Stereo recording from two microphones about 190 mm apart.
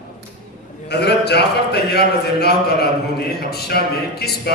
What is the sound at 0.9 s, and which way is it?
A man's voice, 60° left (ahead or behind).